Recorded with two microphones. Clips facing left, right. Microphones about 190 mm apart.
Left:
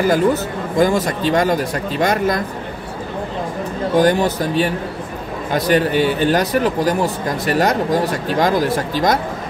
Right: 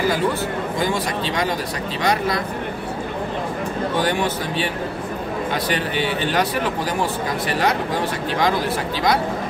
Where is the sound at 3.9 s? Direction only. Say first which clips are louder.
Left 9 dB; 40° left (ahead or behind).